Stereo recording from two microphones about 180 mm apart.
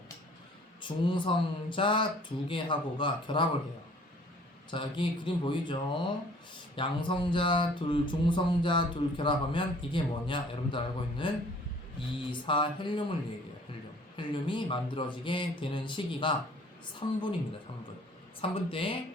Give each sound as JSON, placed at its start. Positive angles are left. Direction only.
{"t": 0.8, "sound": "speech", "side_deg": 25}
{"t": 4.7, "sound": "speech", "side_deg": 25}
{"t": 12.3, "sound": "speech", "side_deg": 25}
{"t": 14.2, "sound": "a woman's voice", "side_deg": 25}
{"t": 18.4, "sound": "speech", "side_deg": 30}